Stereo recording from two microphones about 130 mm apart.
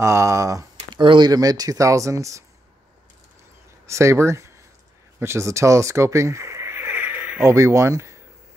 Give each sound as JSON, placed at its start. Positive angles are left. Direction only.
{"t": 0.0, "sound": "speech", "side_deg": -20}
{"t": 0.9, "sound": "speech", "side_deg": -35}
{"t": 3.8, "sound": "speech", "side_deg": -20}